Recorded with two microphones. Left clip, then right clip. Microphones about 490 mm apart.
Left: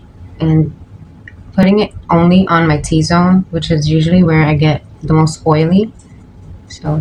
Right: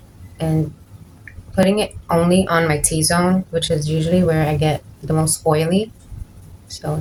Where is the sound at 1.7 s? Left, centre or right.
Right.